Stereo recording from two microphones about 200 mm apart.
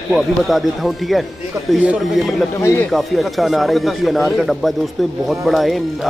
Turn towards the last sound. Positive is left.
turn(degrees=0)  # may be behind; listen again after turning